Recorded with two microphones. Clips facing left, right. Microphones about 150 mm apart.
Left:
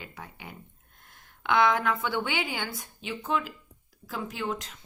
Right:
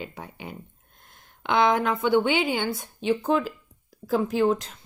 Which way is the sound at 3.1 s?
35° right (ahead or behind).